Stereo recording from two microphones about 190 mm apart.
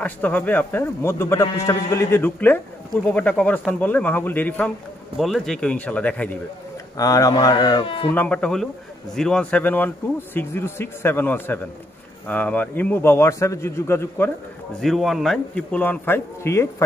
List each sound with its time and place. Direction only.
0.0 s speech: 10° left (ahead or behind)
7.0 s speech: 20° left (ahead or behind)
8.1 s a man's voice: 10° left (ahead or behind)
14.8 s a man's voice: centre (ahead or behind)